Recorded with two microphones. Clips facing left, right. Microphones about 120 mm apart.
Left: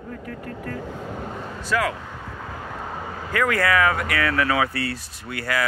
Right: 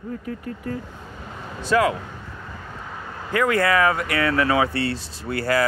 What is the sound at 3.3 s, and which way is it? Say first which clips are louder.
Speech: right 2 dB; 25° right (ahead or behind).